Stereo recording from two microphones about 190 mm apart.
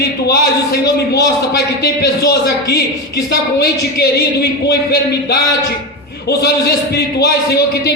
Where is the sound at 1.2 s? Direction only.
55° left (ahead or behind).